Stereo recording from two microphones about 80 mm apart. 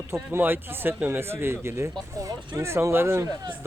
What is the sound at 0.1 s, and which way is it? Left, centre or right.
A man's voice, right.